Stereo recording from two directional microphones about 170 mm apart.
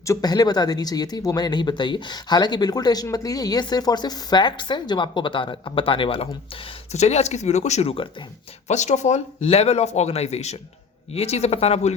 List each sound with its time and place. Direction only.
0.0 s speech: 20° left (ahead or behind); by 11.9 s 40° left (ahead or behind)